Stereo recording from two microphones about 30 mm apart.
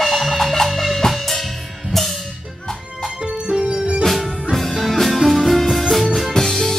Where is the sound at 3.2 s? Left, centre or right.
Right.